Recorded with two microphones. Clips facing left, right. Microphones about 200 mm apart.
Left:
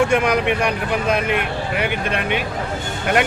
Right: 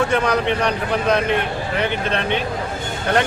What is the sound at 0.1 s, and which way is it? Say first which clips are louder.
Speech: left 1 dB; 10° left (ahead or behind).